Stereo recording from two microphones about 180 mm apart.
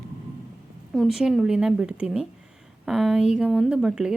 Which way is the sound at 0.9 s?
Centre (ahead or behind).